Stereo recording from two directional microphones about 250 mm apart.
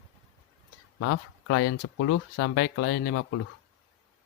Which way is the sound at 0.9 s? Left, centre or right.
Left.